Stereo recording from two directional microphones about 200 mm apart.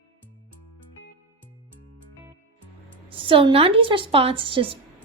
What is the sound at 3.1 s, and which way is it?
A woman's voice, 25° right (ahead or behind).